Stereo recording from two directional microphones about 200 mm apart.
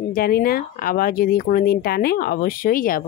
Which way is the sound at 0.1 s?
50° left (ahead or behind).